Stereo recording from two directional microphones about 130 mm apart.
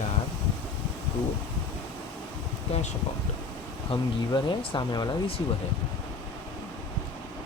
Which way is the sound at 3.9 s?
35° left (ahead or behind).